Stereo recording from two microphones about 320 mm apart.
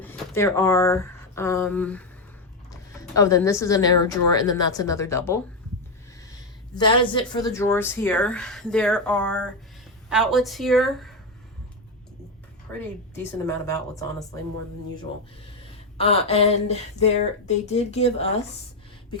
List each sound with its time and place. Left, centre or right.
0.0 s a woman's voice: centre
6.7 s speech: centre
13.7 s a woman's voice: centre
16.0 s speech: centre